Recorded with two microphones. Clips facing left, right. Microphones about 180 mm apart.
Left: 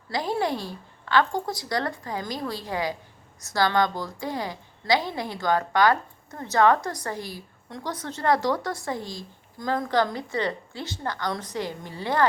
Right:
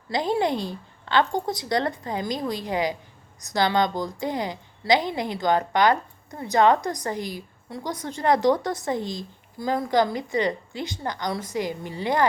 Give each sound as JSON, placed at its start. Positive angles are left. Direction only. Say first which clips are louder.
{"t": 0.1, "sound": "a woman's voice", "louder": "right 3 dB", "side_deg": -20}
{"t": 9.6, "sound": "a woman's voice", "louder": "right 2 dB", "side_deg": -10}